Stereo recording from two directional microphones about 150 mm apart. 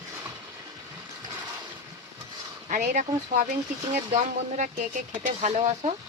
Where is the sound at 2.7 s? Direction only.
55° right (ahead or behind).